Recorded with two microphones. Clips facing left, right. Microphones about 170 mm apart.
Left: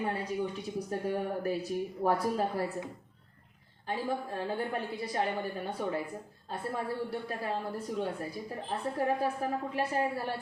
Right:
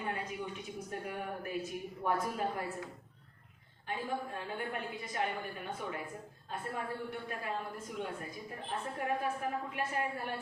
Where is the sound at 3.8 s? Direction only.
35° left (ahead or behind).